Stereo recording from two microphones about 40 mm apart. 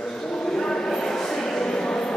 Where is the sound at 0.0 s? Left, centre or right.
Centre.